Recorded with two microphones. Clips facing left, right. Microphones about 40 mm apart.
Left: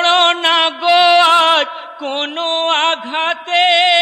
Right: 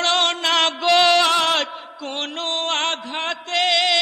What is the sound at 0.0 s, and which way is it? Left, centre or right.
Mantra, left.